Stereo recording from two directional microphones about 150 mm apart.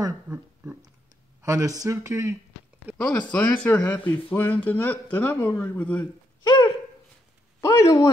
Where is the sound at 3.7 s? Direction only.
10° left (ahead or behind).